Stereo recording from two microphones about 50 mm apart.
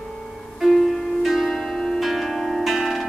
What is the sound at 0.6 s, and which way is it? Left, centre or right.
Music, centre.